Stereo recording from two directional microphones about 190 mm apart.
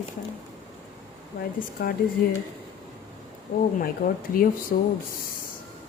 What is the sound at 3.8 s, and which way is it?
Speech, 50° left (ahead or behind).